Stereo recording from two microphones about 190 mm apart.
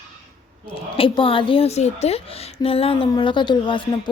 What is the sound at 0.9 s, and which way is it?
Speech, 30° left (ahead or behind).